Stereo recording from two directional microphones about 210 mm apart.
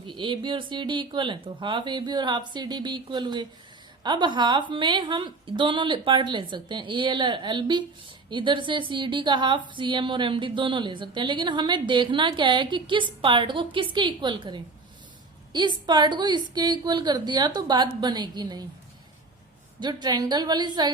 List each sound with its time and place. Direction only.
0.1 s a woman's voice: 25° right (ahead or behind)
19.8 s a woman's voice: 20° right (ahead or behind)